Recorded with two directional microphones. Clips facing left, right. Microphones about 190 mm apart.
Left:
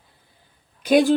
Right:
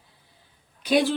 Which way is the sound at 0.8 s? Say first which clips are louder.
Left 5 dB; 50° left (ahead or behind).